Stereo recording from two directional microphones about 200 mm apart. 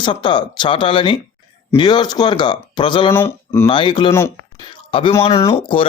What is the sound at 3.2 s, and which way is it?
Speech, 10° left (ahead or behind).